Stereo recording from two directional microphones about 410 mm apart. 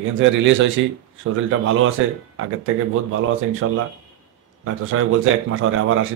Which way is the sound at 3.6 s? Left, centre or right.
Right.